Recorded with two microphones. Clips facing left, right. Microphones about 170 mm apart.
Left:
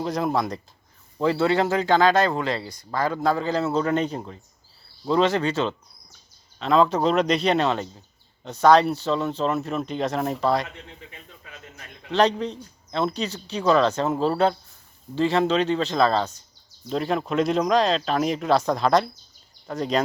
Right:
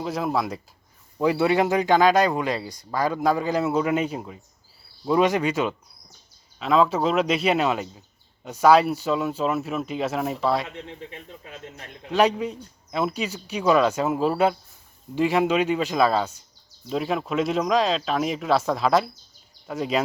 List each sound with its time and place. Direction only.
0.0 s speech: centre (ahead or behind)
10.8 s a man's voice: 60° right (ahead or behind)
12.1 s speech: 10° right (ahead or behind)